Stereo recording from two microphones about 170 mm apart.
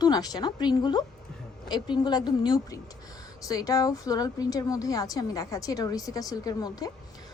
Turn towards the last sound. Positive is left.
turn(degrees=20)  # may be behind; listen again after turning